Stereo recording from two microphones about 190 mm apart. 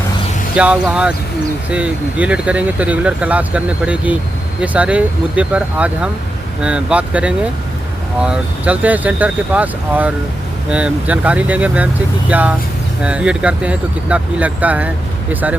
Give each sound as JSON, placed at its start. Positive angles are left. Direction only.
{"t": 0.5, "sound": "speech", "side_deg": -5}